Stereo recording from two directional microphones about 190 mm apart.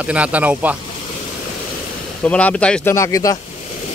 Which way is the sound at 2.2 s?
5° left (ahead or behind).